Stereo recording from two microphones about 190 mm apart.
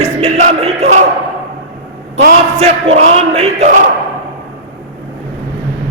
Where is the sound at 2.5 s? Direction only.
35° right (ahead or behind).